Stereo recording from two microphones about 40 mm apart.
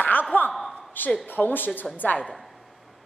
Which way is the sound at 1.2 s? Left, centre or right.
Left.